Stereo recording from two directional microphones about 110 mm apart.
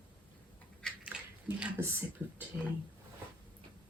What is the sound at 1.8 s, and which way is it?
Speech, 20° right (ahead or behind).